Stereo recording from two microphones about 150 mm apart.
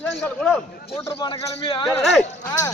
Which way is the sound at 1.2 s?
30° left (ahead or behind).